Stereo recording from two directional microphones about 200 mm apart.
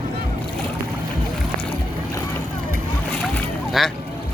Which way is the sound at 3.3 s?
Centre (ahead or behind).